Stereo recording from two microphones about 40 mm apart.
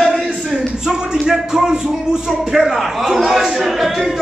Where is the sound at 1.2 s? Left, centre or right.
Centre.